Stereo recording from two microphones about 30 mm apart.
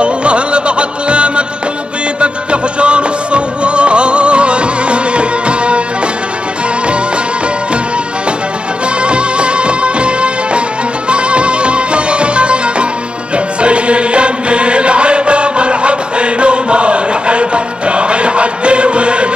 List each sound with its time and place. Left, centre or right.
0.0 s music: right
9.0 s music: right